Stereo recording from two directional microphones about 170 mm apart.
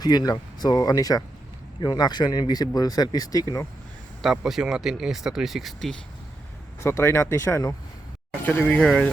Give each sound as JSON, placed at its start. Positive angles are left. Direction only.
{"t": 0.0, "sound": "speech", "side_deg": 25}
{"t": 4.2, "sound": "speech", "side_deg": 0}
{"t": 6.8, "sound": "speech", "side_deg": 15}